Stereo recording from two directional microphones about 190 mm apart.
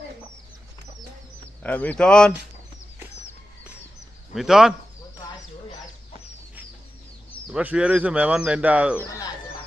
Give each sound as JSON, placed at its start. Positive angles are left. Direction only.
{"t": 1.6, "sound": "speech", "side_deg": 10}
{"t": 4.4, "sound": "speech", "side_deg": 0}
{"t": 7.3, "sound": "speech", "side_deg": 0}
{"t": 9.0, "sound": "speech", "side_deg": 15}